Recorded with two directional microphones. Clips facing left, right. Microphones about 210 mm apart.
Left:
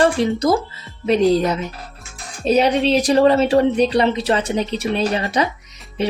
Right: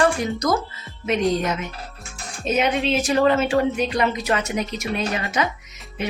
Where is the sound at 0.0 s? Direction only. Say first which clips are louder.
Left 4 dB; 30° left (ahead or behind).